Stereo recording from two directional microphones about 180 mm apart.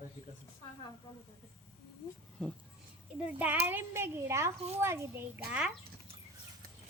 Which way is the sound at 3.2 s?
10° right (ahead or behind).